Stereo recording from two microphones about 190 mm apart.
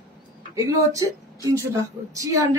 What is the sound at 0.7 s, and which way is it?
Speech, 15° right (ahead or behind).